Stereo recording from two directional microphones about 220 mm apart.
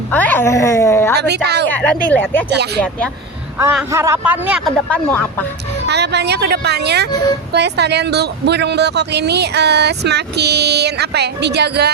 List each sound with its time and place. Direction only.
0.1 s a woman's voice: 10° left (ahead or behind)
1.1 s speech: 50° right (ahead or behind)
1.7 s a woman's voice: 5° left (ahead or behind)
3.9 s speech: 10° right (ahead or behind)
4.9 s a woman's voice: 10° left (ahead or behind)
5.9 s speech: 50° right (ahead or behind)